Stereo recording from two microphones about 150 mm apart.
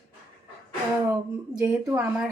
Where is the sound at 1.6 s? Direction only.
15° right (ahead or behind).